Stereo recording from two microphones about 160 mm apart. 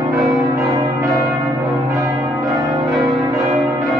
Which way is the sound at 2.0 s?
20° right (ahead or behind).